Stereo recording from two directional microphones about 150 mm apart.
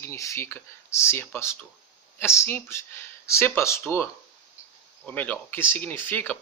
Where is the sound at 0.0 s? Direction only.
20° left (ahead or behind).